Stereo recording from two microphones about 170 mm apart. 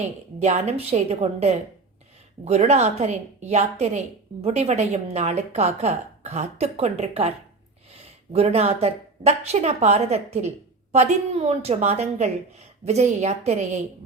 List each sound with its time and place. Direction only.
0.4 s a woman's voice: 40° right (ahead or behind)